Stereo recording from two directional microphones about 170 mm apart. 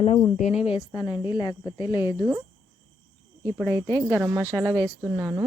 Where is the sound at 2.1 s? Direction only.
10° right (ahead or behind).